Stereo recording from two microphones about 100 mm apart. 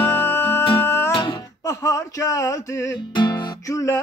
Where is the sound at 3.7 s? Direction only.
25° left (ahead or behind).